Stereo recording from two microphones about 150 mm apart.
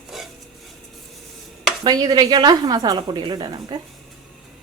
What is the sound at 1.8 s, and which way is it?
A woman's voice, 25° right (ahead or behind).